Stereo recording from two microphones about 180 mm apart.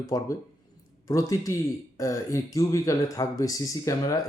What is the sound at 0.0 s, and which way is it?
Speech, 20° left (ahead or behind).